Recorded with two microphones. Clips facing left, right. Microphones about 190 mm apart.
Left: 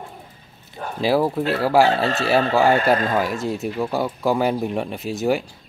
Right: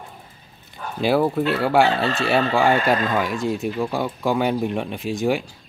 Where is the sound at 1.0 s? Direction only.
Centre (ahead or behind).